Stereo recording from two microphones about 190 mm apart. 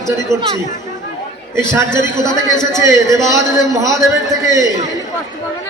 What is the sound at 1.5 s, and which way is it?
Speech, 15° right (ahead or behind).